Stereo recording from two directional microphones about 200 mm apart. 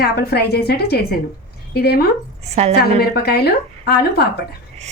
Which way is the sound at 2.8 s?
50° left (ahead or behind).